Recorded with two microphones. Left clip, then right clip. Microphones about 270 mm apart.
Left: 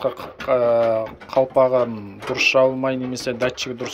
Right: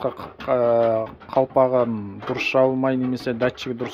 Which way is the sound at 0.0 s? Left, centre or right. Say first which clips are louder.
Left 3 dB; right.